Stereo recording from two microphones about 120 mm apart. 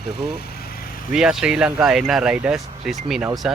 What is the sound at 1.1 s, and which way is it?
Speech, 5° right (ahead or behind).